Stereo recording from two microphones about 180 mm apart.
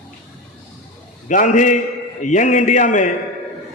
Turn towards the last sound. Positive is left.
turn(degrees=45)  # may be behind; listen again after turning